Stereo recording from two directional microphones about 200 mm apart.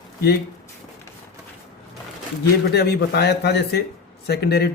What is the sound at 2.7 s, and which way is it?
A man's voice, 55° left (ahead or behind).